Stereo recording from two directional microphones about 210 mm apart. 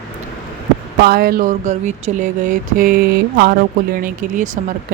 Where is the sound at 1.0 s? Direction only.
45° right (ahead or behind).